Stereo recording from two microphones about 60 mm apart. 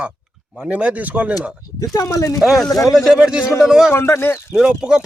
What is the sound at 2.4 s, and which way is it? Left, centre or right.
Speech, centre.